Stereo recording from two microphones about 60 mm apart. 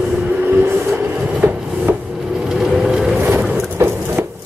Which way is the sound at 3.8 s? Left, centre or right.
Right.